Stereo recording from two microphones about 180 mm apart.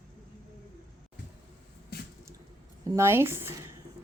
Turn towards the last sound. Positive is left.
turn(degrees=-15)  # may be behind; listen again after turning